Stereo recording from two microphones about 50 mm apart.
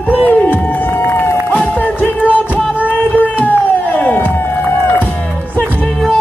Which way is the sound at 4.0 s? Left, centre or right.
Left.